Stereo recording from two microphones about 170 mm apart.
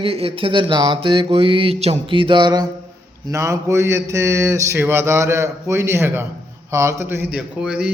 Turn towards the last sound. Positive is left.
turn(degrees=-5)  # may be behind; listen again after turning